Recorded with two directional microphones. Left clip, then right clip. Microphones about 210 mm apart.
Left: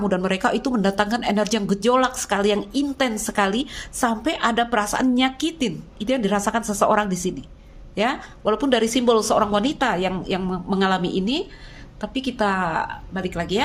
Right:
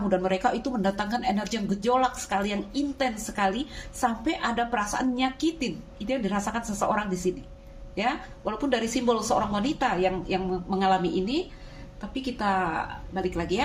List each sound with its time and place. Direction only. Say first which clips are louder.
0.1 s speech: left 1 dB; 40° left (ahead or behind)